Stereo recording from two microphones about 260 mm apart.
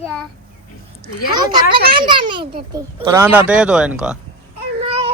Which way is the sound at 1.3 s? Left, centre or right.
Centre.